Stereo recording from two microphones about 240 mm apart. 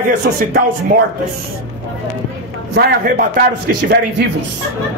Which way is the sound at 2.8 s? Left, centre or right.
Right.